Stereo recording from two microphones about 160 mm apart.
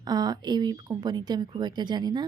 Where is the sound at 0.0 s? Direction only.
25° right (ahead or behind).